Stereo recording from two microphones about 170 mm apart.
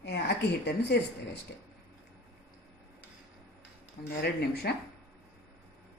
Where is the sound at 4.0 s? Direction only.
75° left (ahead or behind).